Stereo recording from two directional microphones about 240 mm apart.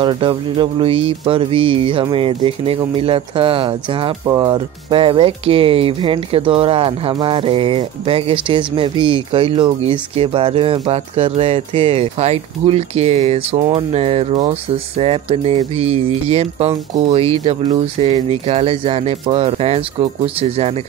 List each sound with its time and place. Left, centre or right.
0.0 s music: centre